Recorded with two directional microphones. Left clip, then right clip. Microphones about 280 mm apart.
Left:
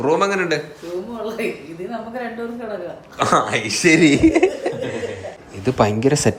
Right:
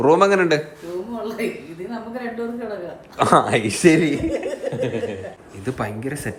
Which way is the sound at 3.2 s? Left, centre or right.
Centre.